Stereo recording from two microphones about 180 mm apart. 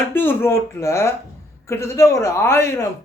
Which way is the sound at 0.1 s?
10° left (ahead or behind).